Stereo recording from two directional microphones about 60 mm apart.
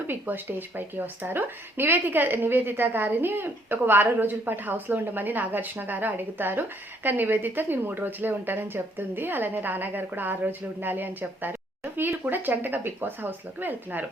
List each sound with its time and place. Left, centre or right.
0.1 s speech: right